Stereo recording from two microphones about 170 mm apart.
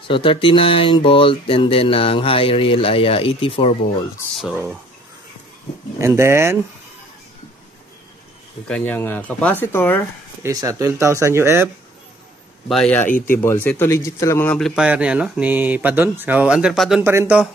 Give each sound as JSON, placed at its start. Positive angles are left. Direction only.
{"t": 0.1, "sound": "speech", "side_deg": 30}
{"t": 4.4, "sound": "speech", "side_deg": -5}
{"t": 5.9, "sound": "speech", "side_deg": -15}
{"t": 8.6, "sound": "speech", "side_deg": 5}
{"t": 10.4, "sound": "speech", "side_deg": -20}
{"t": 12.6, "sound": "speech", "side_deg": 5}
{"t": 14.8, "sound": "speech", "side_deg": -5}
{"t": 17.0, "sound": "speech", "side_deg": -15}